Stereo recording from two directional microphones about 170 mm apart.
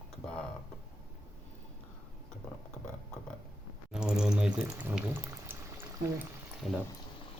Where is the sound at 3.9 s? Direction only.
5° right (ahead or behind).